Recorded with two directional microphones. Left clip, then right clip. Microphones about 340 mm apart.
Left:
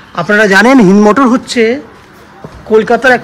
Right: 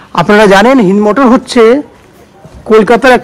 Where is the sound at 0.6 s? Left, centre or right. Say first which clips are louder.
Even; centre.